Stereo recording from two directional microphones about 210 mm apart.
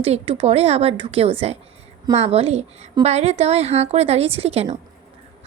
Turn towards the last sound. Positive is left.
turn(degrees=-30)  # may be behind; listen again after turning